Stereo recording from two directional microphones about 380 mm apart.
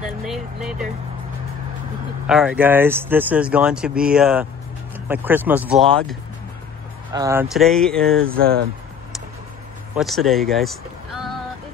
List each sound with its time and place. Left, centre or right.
0.2 s speech: centre
2.2 s speech: centre
7.1 s speech: centre
8.2 s speech: right
9.9 s speech: centre